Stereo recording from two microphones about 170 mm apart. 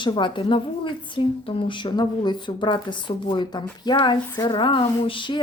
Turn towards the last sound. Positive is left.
turn(degrees=30)  # may be behind; listen again after turning